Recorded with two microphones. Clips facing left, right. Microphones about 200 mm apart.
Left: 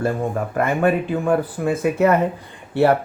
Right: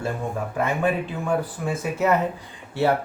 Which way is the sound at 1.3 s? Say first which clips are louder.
Left 5 dB; 60° left (ahead or behind).